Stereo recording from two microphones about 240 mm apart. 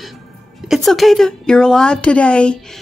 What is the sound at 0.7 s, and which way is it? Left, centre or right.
A woman's voice, centre.